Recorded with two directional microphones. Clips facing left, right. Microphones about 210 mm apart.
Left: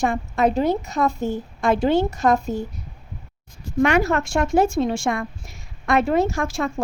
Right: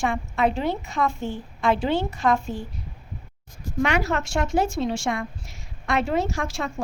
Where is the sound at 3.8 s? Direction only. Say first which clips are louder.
Left 5 dB; 50° left (ahead or behind).